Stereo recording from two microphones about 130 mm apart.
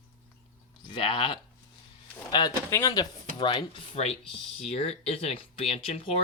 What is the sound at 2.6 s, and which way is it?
Speech, 25° left (ahead or behind).